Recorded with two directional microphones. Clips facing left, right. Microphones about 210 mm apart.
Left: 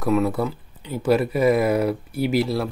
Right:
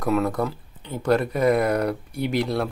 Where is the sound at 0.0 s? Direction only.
5° left (ahead or behind).